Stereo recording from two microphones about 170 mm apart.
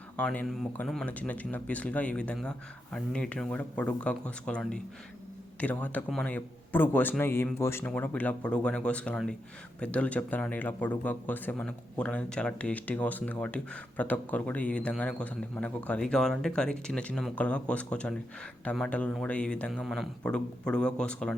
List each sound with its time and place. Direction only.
0.2 s speech: 5° left (ahead or behind)